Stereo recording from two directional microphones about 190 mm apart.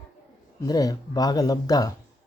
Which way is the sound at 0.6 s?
20° left (ahead or behind).